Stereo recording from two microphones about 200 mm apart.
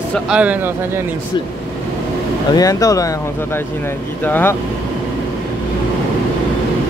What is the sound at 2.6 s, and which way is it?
Speech, 15° left (ahead or behind).